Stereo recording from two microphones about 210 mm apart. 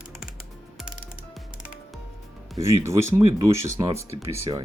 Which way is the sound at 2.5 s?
15° right (ahead or behind).